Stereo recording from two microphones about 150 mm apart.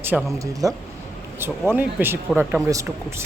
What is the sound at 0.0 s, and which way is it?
Speech, 15° right (ahead or behind).